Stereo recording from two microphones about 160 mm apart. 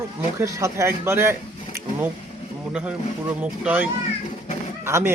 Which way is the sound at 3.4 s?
10° right (ahead or behind).